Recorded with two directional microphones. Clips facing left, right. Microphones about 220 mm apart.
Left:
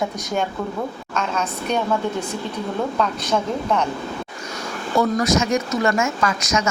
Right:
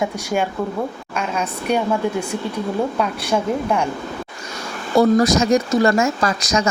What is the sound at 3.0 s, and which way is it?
Speech, 10° right (ahead or behind).